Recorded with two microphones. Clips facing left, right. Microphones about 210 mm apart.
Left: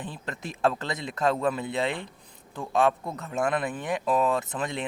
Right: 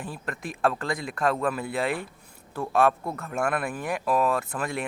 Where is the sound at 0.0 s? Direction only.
25° left (ahead or behind).